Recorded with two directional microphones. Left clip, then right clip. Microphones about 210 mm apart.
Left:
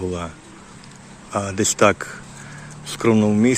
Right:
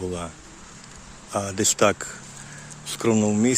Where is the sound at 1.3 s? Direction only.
5° right (ahead or behind).